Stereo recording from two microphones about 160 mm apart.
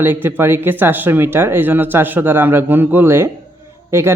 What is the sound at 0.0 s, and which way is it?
Speech, 15° right (ahead or behind).